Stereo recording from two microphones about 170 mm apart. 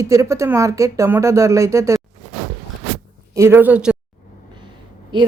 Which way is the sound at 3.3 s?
15° right (ahead or behind).